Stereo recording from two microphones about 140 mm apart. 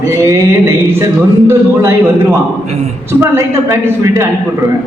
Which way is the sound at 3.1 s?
20° right (ahead or behind).